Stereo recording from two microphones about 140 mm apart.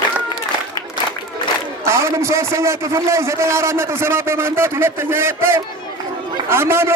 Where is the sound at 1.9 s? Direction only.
20° right (ahead or behind).